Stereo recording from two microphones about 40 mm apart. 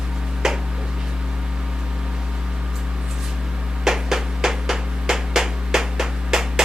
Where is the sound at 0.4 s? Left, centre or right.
Centre.